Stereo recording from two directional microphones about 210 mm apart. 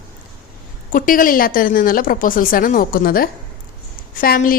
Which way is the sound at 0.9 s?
40° left (ahead or behind).